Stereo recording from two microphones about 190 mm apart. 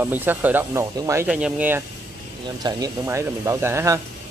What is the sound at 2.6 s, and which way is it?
Speech, 20° right (ahead or behind).